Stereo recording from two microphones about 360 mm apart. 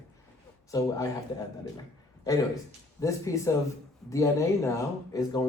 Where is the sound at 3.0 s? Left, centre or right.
Centre.